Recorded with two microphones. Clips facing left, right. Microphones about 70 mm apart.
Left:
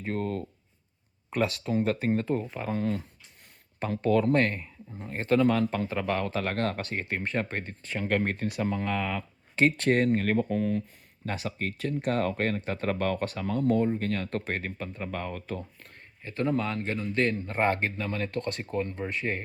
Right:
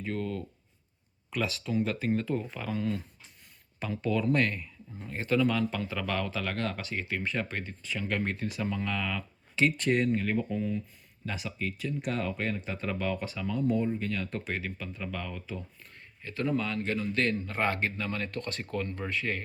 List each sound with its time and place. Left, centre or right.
0.0 s speech: left
16.2 s speech: left